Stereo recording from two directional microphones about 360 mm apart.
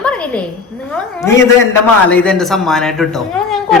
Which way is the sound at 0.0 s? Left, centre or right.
Centre.